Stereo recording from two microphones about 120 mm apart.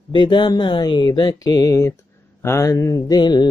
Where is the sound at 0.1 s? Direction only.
40° left (ahead or behind).